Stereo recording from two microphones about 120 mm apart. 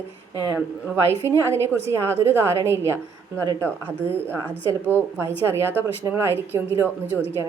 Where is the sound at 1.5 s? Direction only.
20° right (ahead or behind).